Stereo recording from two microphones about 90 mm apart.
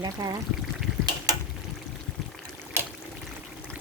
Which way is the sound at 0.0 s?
50° right (ahead or behind).